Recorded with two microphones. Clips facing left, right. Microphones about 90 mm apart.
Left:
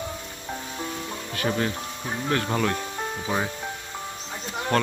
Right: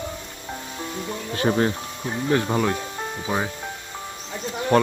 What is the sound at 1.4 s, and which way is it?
Speech, 30° right (ahead or behind).